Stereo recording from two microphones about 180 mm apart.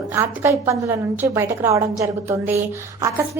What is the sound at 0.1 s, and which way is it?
A woman's voice, 15° right (ahead or behind).